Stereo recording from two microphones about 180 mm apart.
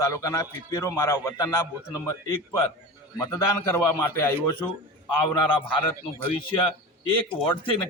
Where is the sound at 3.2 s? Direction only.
15° left (ahead or behind).